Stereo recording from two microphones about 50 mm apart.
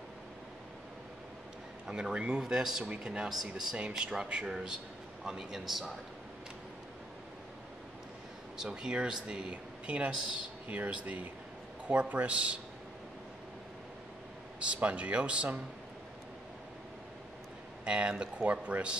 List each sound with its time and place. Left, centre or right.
1.9 s speech: centre
2.8 s speech: right
3.3 s a man's voice: centre
4.0 s a man's voice: centre
8.5 s speech: centre
14.8 s speech: right
17.8 s speech: right